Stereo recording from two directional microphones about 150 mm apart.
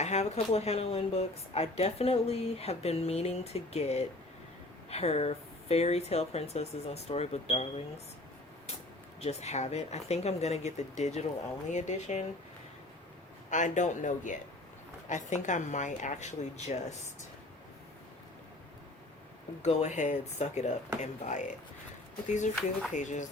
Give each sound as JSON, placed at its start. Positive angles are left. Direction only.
{"t": 0.0, "sound": "speech", "side_deg": 50}
{"t": 9.2, "sound": "speech", "side_deg": 45}
{"t": 13.5, "sound": "speech", "side_deg": 55}
{"t": 19.6, "sound": "speech", "side_deg": 50}